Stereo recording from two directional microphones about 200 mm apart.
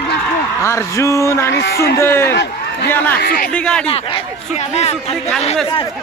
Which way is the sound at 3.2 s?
45° left (ahead or behind).